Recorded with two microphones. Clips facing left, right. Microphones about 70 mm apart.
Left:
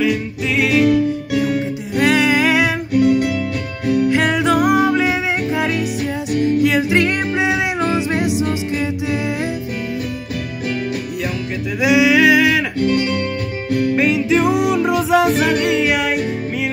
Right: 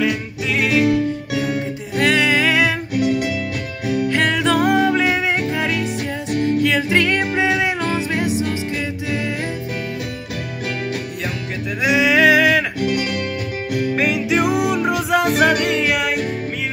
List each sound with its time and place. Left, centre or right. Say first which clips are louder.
0.0 s music: left 2 dB; centre
2.0 s music: left 2 dB; centre
2.9 s music: left 4 dB; centre
4.1 s music: right 1 dB; centre
11.8 s singing: left 2 dB; centre
12.7 s music: left 4 dB; centre